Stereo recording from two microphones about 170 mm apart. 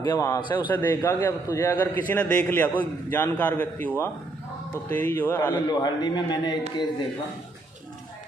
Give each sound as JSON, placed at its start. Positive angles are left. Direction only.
{"t": 0.0, "sound": "a man's voice", "side_deg": 20}
{"t": 0.7, "sound": "a man's voice", "side_deg": 15}
{"t": 5.7, "sound": "a man's voice", "side_deg": 25}